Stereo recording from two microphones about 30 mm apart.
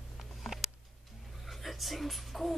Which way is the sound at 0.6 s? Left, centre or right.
Centre.